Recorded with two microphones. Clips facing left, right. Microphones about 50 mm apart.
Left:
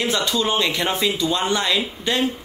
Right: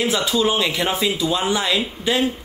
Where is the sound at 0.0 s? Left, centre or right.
Centre.